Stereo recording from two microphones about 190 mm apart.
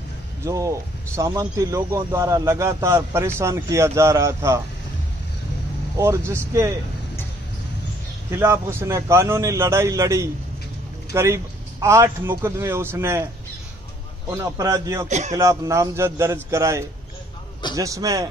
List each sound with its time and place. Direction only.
0.5 s a man's voice: 15° right (ahead or behind)
5.9 s a man's voice: 15° right (ahead or behind)
8.3 s a man's voice: 15° right (ahead or behind)
14.3 s a man's voice: 15° right (ahead or behind)
15.0 s speech: 35° right (ahead or behind)
15.3 s a man's voice: 15° right (ahead or behind)